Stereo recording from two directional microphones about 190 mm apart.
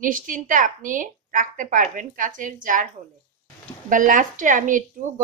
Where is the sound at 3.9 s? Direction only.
45° right (ahead or behind).